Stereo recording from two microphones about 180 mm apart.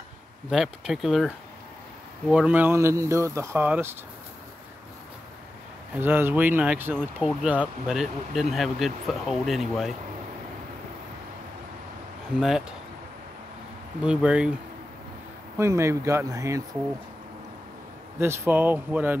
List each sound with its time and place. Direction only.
0.5 s speech: centre (ahead or behind)
5.9 s speech: 10° right (ahead or behind)
12.4 s speech: 5° right (ahead or behind)
14.0 s speech: 5° right (ahead or behind)
15.5 s speech: 15° right (ahead or behind)
18.2 s speech: 15° right (ahead or behind)